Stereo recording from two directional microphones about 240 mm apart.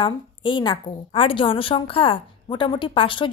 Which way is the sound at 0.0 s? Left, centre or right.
Left.